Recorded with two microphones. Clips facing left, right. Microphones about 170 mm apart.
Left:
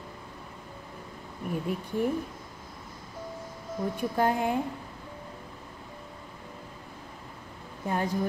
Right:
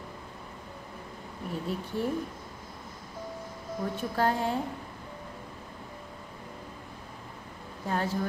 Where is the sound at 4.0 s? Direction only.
15° left (ahead or behind).